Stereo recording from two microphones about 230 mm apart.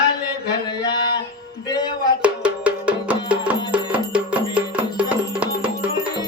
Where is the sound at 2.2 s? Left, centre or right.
Centre.